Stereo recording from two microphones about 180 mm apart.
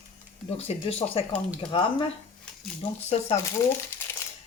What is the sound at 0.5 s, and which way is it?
Speech, 35° left (ahead or behind).